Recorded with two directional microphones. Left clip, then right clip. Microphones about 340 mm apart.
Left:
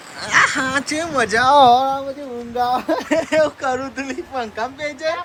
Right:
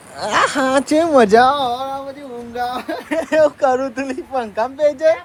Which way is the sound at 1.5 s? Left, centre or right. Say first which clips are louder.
Left 9 dB; centre.